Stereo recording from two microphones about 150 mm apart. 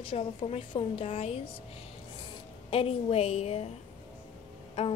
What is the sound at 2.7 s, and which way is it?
A woman's voice, 40° left (ahead or behind).